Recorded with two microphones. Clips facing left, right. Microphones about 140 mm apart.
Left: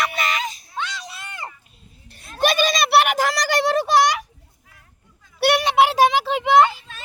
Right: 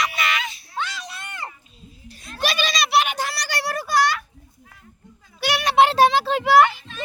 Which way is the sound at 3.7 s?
20° left (ahead or behind).